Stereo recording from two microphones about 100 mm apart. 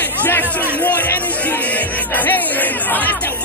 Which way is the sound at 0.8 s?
15° left (ahead or behind).